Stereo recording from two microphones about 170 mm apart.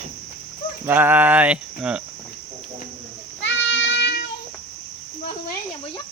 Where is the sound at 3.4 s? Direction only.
90° left.